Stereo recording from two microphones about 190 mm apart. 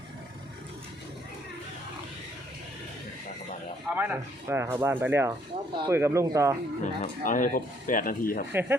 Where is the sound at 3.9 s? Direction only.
10° right (ahead or behind).